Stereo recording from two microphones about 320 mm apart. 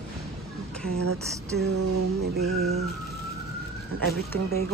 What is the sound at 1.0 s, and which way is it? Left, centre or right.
Speech, right.